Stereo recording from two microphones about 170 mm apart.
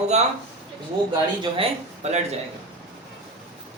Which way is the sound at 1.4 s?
35° right (ahead or behind).